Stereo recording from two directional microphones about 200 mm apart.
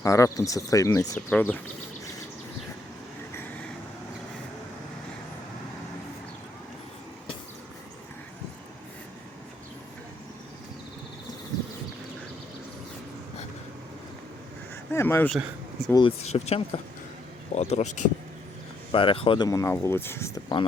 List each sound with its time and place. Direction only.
0.0 s speech: 15° left (ahead or behind)
14.9 s speech: 10° left (ahead or behind)
15.9 s speech: 25° left (ahead or behind)